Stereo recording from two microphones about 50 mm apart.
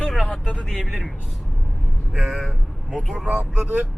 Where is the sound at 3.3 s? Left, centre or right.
Right.